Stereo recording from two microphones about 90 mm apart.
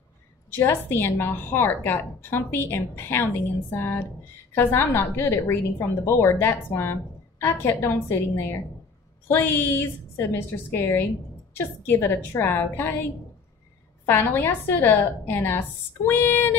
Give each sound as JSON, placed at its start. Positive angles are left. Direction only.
{"t": 0.5, "sound": "a woman's voice", "side_deg": 25}